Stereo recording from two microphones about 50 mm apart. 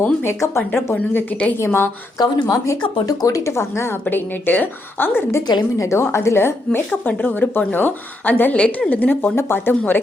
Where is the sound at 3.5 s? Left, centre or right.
Left.